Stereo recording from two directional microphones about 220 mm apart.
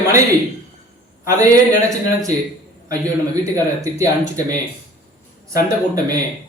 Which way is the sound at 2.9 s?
15° right (ahead or behind).